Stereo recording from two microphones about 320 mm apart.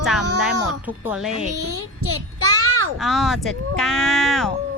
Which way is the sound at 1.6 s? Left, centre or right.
Right.